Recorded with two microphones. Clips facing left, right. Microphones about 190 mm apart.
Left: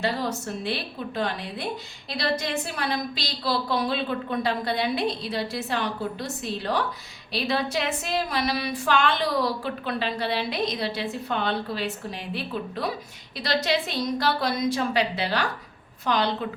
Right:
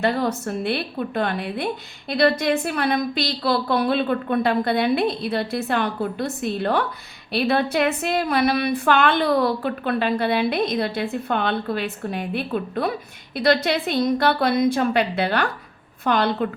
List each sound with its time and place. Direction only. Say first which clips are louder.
0.0 s a woman's voice: right 5 dB; 55° right (ahead or behind)